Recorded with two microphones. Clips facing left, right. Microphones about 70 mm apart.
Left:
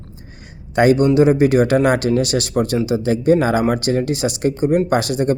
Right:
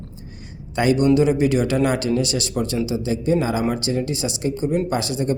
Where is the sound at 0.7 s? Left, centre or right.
Left.